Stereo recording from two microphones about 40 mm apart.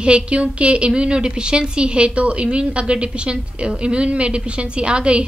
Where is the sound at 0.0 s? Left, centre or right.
Right.